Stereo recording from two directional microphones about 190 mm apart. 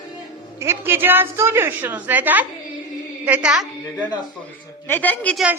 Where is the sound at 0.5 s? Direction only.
15° right (ahead or behind).